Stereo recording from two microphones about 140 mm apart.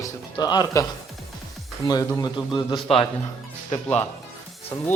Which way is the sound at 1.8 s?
40° left (ahead or behind).